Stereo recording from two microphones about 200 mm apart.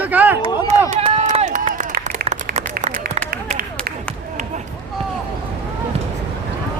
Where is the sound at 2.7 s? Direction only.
45° right (ahead or behind).